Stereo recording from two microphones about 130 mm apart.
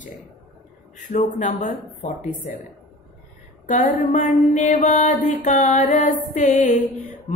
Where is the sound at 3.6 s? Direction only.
80° left.